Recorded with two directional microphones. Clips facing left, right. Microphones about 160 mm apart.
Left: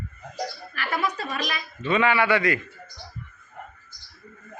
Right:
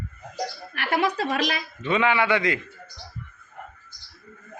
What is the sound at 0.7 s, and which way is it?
Speech, 75° right (ahead or behind).